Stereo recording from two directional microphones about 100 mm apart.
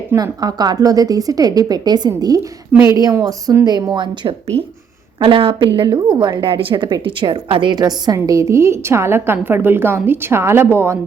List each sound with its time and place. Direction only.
0.2 s a woman's voice: 40° right (ahead or behind); by 10.9 s 25° right (ahead or behind)